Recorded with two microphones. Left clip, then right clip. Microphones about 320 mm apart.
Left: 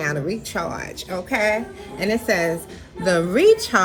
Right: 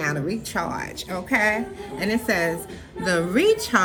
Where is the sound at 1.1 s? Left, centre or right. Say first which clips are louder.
Left 2 dB; left.